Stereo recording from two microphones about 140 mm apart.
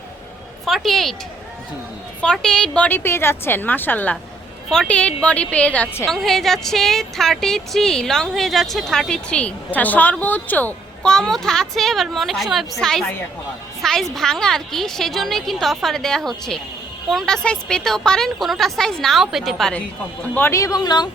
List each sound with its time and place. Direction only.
0.6 s speech: centre (ahead or behind)
2.2 s a woman's voice: 5° left (ahead or behind)
6.1 s speech: centre (ahead or behind)
20.3 s speech: 20° left (ahead or behind)